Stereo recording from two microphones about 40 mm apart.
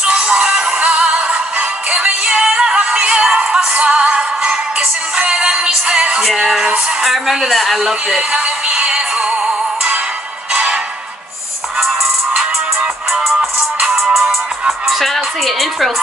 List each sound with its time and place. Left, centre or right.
0.0 s music: right
7.4 s speech: centre
8.3 s synthetic singing: right
10.5 s music: right
13.1 s music: centre
14.9 s speech: centre